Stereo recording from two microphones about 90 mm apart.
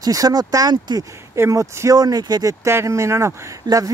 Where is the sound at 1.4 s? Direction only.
30° right (ahead or behind).